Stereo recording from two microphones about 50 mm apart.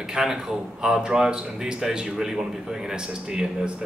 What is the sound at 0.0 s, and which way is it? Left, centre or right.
Speech, centre.